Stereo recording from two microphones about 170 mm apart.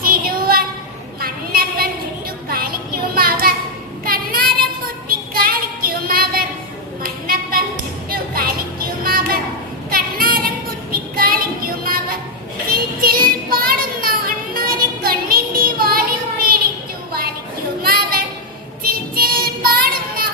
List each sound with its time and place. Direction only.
0.0 s child singing: 60° right (ahead or behind)
1.2 s a sound: 60° right (ahead or behind)
2.5 s child singing: 60° right (ahead or behind)
5.0 s a sound: 60° right (ahead or behind)
8.1 s music: 60° right (ahead or behind)
9.9 s child singing: 60° right (ahead or behind)
12.7 s music: 60° right (ahead or behind)
17.8 s a sound: 60° right (ahead or behind)
18.8 s child singing: 60° right (ahead or behind)